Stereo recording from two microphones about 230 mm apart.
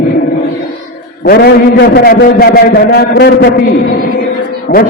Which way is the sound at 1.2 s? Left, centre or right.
Left.